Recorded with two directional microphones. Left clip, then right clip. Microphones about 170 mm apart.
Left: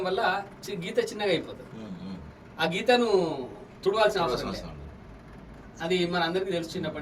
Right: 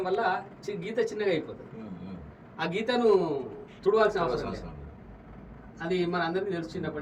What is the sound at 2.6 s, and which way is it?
Speech, 15° left (ahead or behind).